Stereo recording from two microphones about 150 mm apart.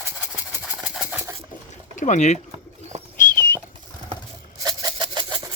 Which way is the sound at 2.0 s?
55° left (ahead or behind).